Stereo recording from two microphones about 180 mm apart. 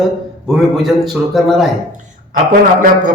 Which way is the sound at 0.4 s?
Centre (ahead or behind).